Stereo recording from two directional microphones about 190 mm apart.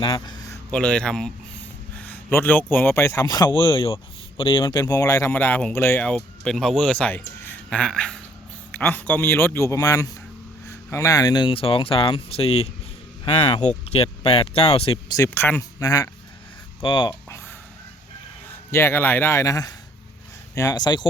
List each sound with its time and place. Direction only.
0.0 s speech: 25° left (ahead or behind)
15.1 s speech: 15° left (ahead or behind)
18.4 s speech: 15° left (ahead or behind)